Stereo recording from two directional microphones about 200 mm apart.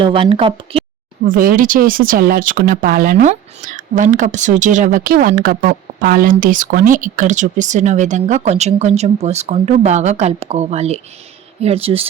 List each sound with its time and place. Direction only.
0.0 s speech: 25° right (ahead or behind)
1.2 s speech: 45° right (ahead or behind); by 12.0 s 30° right (ahead or behind)